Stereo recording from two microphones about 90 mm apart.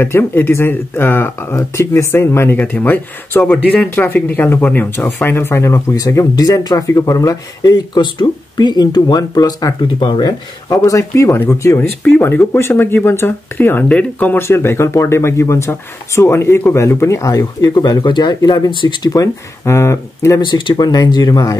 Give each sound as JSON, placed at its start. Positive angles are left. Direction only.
{"t": 0.0, "sound": "speech", "side_deg": 25}
{"t": 9.9, "sound": "speech", "side_deg": 60}
{"t": 10.7, "sound": "speech", "side_deg": 40}
{"t": 12.0, "sound": "speech", "side_deg": 25}
{"t": 14.4, "sound": "speech", "side_deg": 30}
{"t": 19.0, "sound": "speech", "side_deg": 40}
{"t": 20.3, "sound": "speech", "side_deg": 60}